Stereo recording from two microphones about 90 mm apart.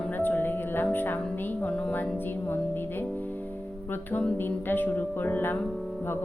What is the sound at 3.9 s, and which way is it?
Speech, 20° left (ahead or behind).